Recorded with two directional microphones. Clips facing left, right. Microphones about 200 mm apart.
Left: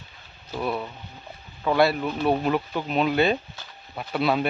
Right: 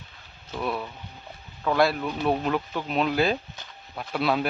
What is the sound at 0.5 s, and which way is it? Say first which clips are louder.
Speech: left 2 dB; centre (ahead or behind).